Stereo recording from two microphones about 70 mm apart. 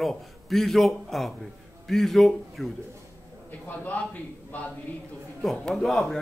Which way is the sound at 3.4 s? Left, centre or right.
Left.